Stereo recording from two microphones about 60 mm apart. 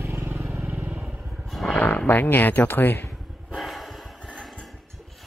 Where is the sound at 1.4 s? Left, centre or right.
Centre.